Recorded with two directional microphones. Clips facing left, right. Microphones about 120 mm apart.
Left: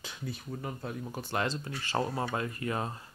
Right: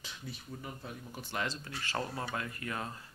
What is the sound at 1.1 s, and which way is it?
Speech, 50° left (ahead or behind).